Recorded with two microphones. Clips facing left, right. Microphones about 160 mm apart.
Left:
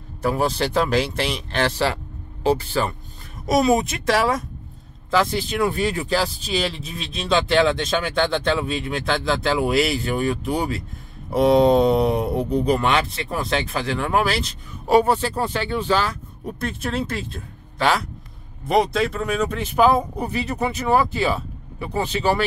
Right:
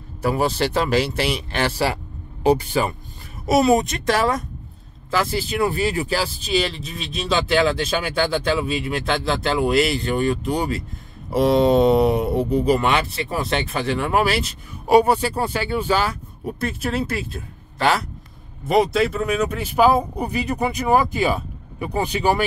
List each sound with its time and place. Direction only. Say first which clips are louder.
0.2 s speech: right 1 dB; 5° right (ahead or behind)
3.4 s speech: right 2 dB; centre (ahead or behind)